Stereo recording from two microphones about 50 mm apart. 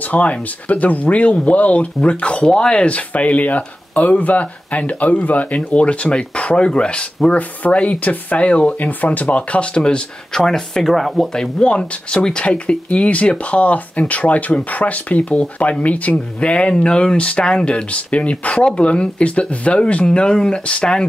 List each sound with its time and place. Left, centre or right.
0.1 s speech: left; by 11.2 s centre
11.3 s speech: left
20.1 s speech: centre